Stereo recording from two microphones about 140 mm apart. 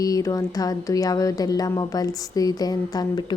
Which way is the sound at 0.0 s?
25° left (ahead or behind).